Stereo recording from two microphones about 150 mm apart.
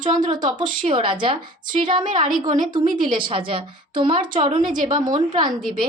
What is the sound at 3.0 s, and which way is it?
A woman's voice, 35° right (ahead or behind).